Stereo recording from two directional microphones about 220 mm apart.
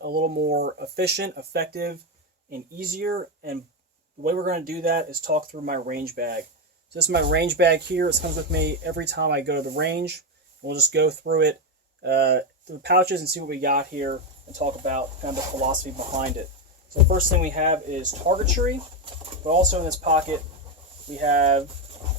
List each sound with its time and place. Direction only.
0.0 s speech: 45° right (ahead or behind)
17.1 s speech: 40° right (ahead or behind)